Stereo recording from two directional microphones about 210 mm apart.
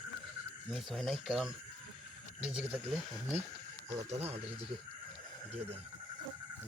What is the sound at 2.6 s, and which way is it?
Speech, 5° right (ahead or behind).